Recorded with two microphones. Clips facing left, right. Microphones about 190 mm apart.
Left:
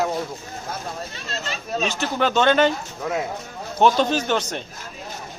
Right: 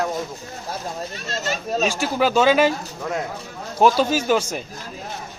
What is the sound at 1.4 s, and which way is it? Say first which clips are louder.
Speech: right 4 dB; 40° right (ahead or behind).